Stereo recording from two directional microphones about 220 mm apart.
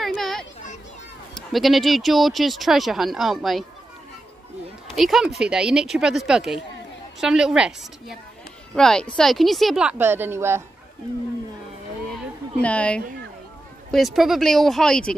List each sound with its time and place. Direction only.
0.0 s a sound: centre (ahead or behind)
1.3 s speech: centre (ahead or behind)
4.9 s speech: centre (ahead or behind)
12.6 s speech: 5° left (ahead or behind)